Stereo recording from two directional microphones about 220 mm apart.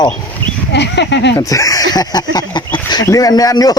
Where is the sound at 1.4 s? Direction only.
15° left (ahead or behind).